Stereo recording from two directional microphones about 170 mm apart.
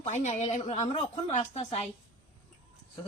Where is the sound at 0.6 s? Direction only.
30° left (ahead or behind).